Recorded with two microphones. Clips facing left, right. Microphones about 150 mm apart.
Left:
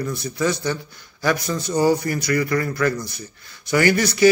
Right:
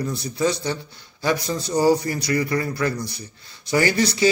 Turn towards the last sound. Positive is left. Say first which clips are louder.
# left 2 dB
turn(degrees=-30)  # may be behind; listen again after turning